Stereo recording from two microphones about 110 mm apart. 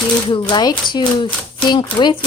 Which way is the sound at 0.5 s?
45° left (ahead or behind).